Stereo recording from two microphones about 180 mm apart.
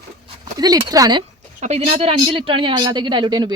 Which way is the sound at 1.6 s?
35° right (ahead or behind).